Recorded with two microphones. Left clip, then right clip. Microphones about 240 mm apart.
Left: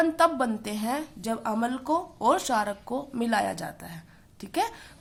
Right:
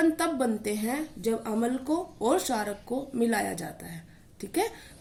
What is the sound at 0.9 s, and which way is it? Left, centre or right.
Speech, left.